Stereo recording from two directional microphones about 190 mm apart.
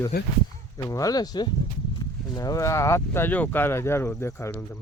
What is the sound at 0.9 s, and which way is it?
Speech, 20° left (ahead or behind).